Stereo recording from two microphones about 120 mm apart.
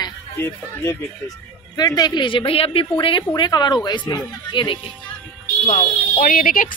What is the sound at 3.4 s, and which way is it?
Speech, 35° left (ahead or behind).